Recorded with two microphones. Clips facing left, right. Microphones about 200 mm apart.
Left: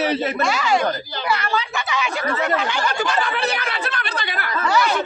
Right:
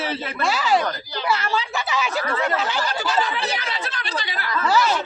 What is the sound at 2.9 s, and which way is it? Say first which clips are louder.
Speech: left 1 dB; 60° left (ahead or behind).